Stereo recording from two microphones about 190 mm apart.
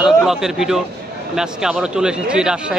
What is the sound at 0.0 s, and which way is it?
A man's voice, 5° right (ahead or behind).